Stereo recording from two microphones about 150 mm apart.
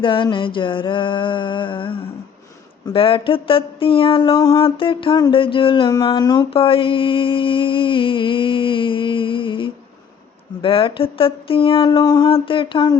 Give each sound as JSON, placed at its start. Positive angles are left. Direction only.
{"t": 0.0, "sound": "mantra", "side_deg": 35}
{"t": 6.5, "sound": "mantra", "side_deg": 35}